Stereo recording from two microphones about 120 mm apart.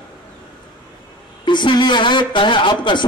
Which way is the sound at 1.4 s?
40° left (ahead or behind).